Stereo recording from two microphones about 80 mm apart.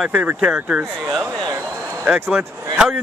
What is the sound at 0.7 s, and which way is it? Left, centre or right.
Speech, centre.